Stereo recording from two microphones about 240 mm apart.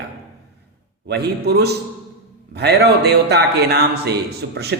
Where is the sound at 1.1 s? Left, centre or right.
Right.